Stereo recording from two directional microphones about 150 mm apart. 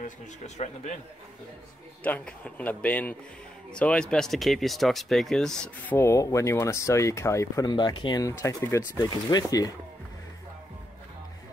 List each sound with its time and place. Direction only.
2.0 s a man's voice: 10° left (ahead or behind)
5.9 s speech: 20° left (ahead or behind)